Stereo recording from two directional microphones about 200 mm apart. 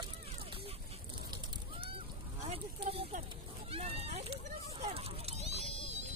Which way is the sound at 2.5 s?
30° right (ahead or behind).